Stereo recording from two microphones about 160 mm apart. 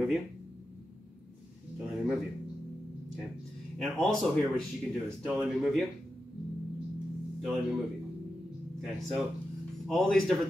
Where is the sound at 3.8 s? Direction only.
5° left (ahead or behind).